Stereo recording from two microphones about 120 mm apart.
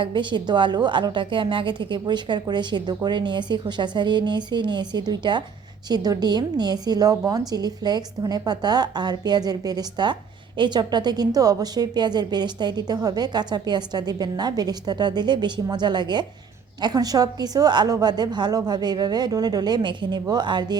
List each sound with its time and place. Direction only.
0.0 s a woman's voice: 40° right (ahead or behind)